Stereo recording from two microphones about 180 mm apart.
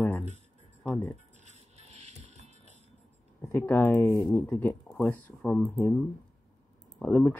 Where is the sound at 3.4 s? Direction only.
10° left (ahead or behind).